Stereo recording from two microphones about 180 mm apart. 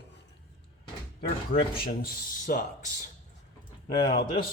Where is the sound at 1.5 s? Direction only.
50° left (ahead or behind).